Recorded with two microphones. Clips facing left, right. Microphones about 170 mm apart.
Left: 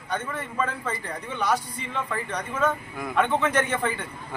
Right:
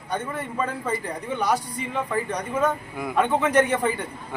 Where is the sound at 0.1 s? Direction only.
15° right (ahead or behind).